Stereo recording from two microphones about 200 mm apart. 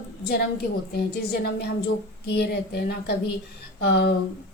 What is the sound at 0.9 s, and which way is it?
A woman's voice, 50° left (ahead or behind).